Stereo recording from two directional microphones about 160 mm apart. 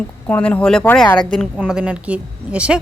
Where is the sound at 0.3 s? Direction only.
10° left (ahead or behind).